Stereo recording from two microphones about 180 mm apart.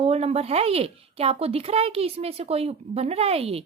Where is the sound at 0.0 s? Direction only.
35° right (ahead or behind).